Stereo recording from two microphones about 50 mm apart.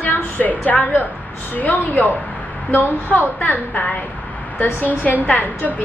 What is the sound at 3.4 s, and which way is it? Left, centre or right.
A woman's voice, left.